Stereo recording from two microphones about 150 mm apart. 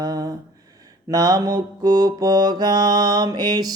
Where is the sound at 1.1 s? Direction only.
25° right (ahead or behind).